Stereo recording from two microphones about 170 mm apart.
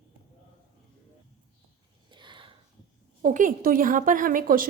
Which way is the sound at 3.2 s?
50° right (ahead or behind).